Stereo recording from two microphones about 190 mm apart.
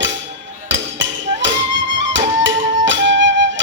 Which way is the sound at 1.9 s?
75° right (ahead or behind).